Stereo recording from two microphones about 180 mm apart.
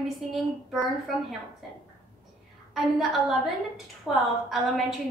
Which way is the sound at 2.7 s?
Centre (ahead or behind).